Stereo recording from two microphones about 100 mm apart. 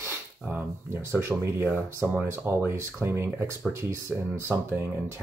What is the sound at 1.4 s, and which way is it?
Speech, 20° right (ahead or behind).